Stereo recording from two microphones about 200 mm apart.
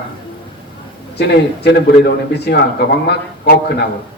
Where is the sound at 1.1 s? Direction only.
55° left (ahead or behind).